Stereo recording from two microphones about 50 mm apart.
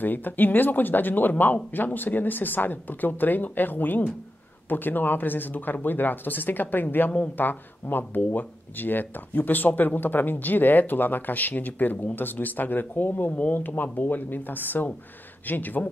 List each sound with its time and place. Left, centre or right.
0.0 s speech: left